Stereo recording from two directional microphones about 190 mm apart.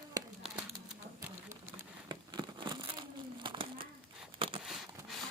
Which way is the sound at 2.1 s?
25° right (ahead or behind).